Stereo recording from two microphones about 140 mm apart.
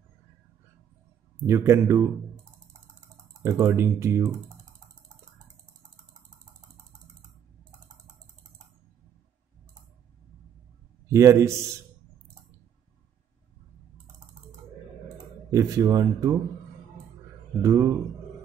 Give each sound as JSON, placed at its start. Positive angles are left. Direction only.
{"t": 1.4, "sound": "speech", "side_deg": -20}
{"t": 3.4, "sound": "speech", "side_deg": -20}
{"t": 11.1, "sound": "a man's voice", "side_deg": -20}
{"t": 15.5, "sound": "speech", "side_deg": -25}
{"t": 17.6, "sound": "speech", "side_deg": -25}